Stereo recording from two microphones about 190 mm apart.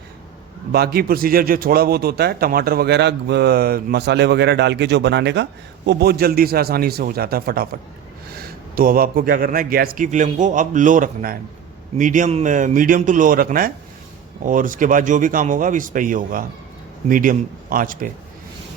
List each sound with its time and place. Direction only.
0.7 s a man's voice: 55° right (ahead or behind)